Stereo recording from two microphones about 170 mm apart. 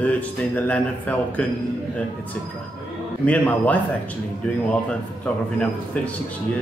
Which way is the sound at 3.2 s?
10° left (ahead or behind).